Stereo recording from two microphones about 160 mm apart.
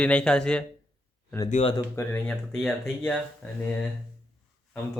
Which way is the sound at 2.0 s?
15° left (ahead or behind).